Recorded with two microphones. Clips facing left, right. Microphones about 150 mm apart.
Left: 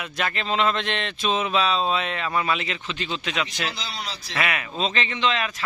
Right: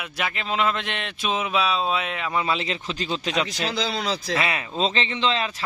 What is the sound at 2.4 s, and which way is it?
Speech, 30° right (ahead or behind).